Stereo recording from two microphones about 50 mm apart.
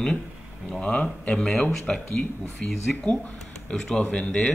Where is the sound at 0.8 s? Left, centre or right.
Left.